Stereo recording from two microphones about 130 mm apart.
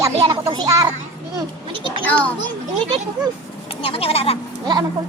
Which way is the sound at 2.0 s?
10° left (ahead or behind).